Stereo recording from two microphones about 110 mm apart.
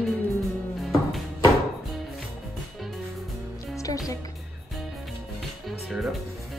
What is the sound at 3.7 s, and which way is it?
Music, 30° left (ahead or behind).